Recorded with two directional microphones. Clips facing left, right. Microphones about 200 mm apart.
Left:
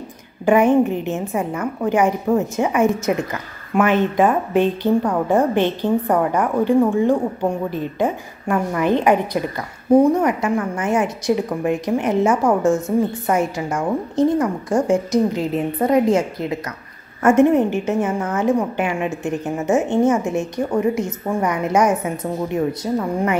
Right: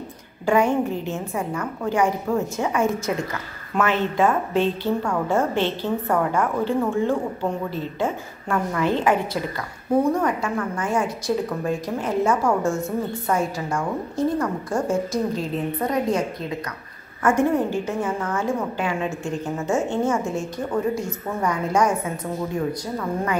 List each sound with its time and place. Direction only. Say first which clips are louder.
0.5 s a woman's voice: left 5 dB; 20° left (ahead or behind)